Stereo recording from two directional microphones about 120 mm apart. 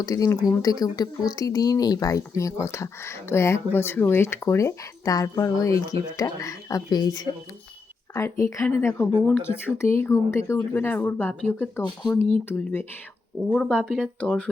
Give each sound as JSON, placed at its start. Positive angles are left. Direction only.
{"t": 0.0, "sound": "speech", "side_deg": 30}
{"t": 8.1, "sound": "speech", "side_deg": 25}
{"t": 14.2, "sound": "speech", "side_deg": 10}